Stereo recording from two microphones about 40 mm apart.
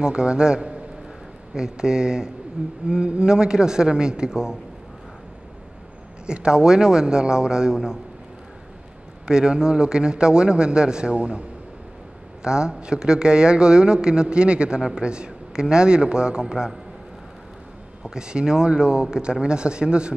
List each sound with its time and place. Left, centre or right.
0.0 s speech: right
6.2 s a man's voice: right
9.3 s speech: centre
12.4 s a man's voice: right
18.0 s speech: centre